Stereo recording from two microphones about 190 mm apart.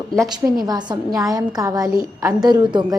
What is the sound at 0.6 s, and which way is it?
A woman's voice, 20° right (ahead or behind).